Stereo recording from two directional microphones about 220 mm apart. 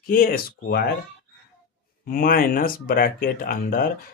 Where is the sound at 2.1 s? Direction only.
40° left (ahead or behind).